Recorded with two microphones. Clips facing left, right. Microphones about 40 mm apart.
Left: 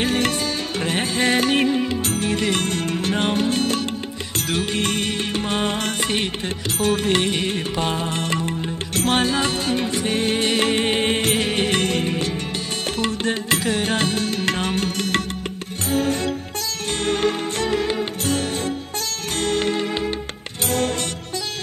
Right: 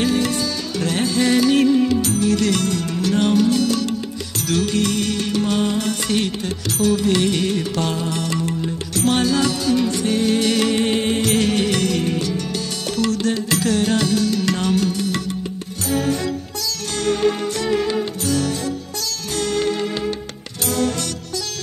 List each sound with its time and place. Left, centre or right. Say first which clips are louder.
0.0 s music: right 2 dB; left
0.8 s music: right 3 dB; left
4.5 s music: right 4 dB; left
6.1 s music: right 2 dB; left
14.9 s music: even; left